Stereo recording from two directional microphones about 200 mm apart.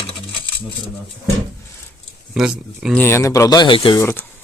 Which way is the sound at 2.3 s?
Centre (ahead or behind).